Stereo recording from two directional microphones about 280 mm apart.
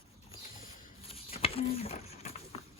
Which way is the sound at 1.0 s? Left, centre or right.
Left.